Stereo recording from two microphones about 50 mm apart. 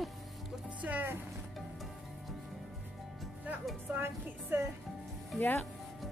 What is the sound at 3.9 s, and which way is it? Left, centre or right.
Speech, right.